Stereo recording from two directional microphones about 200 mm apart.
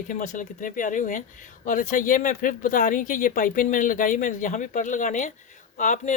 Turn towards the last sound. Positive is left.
turn(degrees=40)  # may be behind; listen again after turning